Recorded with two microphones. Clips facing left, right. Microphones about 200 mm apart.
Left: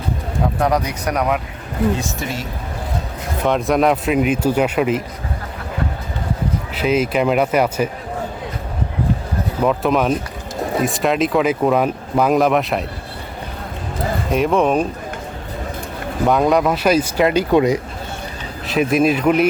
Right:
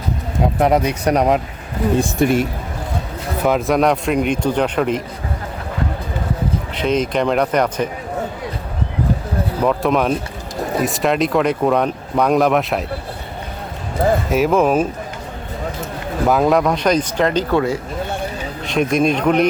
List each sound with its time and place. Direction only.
0.4 s speech: 20° right (ahead or behind)
2.0 s speech: 55° right (ahead or behind)
3.4 s speech: centre (ahead or behind)
6.7 s speech: 5° left (ahead or behind)
9.6 s speech: centre (ahead or behind)
14.3 s speech: 5° right (ahead or behind)
16.2 s speech: centre (ahead or behind); by 17.7 s 15° left (ahead or behind)
18.7 s speech: 5° left (ahead or behind)